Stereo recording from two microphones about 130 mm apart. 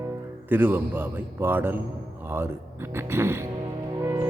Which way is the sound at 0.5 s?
15° right (ahead or behind).